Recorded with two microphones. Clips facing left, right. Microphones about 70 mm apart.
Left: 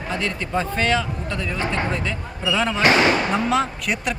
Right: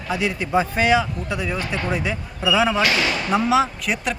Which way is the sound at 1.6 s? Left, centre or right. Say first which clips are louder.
Left 2 dB; left.